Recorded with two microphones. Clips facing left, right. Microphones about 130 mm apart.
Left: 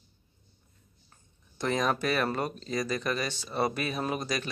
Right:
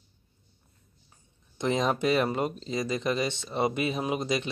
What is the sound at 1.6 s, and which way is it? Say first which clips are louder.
Speech: right 2 dB; 20° right (ahead or behind).